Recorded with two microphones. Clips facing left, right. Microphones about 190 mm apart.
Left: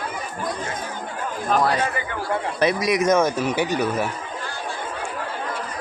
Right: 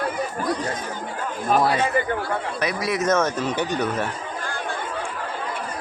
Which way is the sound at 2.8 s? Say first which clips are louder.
Left 1 dB; 15° left (ahead or behind).